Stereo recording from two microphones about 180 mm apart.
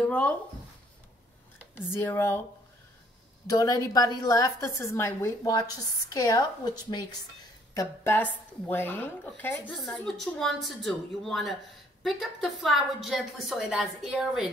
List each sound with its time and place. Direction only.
1.8 s a woman's voice: 15° left (ahead or behind)
3.4 s a woman's voice: 20° left (ahead or behind); by 14.5 s 5° right (ahead or behind)